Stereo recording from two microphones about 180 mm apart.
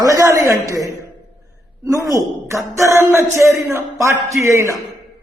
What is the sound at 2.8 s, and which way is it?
A man's voice, 15° right (ahead or behind).